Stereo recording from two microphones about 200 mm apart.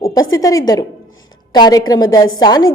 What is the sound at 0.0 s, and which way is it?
A woman's voice, 15° left (ahead or behind).